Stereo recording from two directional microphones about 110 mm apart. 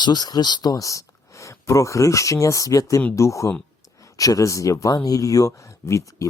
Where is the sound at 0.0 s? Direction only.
40° left (ahead or behind).